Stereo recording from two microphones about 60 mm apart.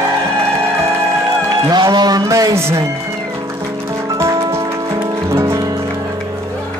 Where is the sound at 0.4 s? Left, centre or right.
Right.